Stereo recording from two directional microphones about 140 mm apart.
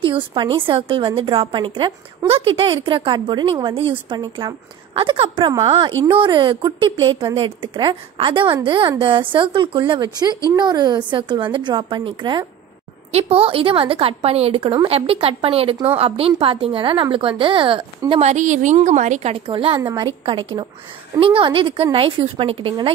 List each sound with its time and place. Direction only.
0.0 s a woman's voice: 35° right (ahead or behind)
18.2 s a woman's voice: 60° right (ahead or behind); by 22.9 s 40° right (ahead or behind)